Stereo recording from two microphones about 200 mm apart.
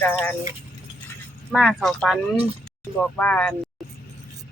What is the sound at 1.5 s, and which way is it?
Speech, centre (ahead or behind).